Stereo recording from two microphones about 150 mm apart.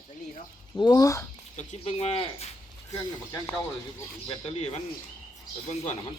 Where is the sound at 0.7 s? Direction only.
25° left (ahead or behind).